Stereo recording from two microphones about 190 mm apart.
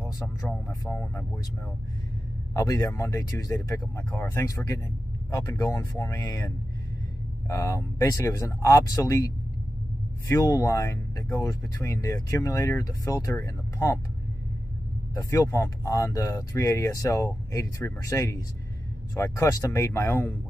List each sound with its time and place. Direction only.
0.4 s speech: 10° left (ahead or behind)
2.5 s speech: 20° left (ahead or behind)
15.1 s speech: 15° left (ahead or behind)